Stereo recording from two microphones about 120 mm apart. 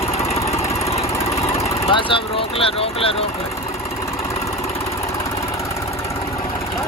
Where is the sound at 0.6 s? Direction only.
25° left (ahead or behind).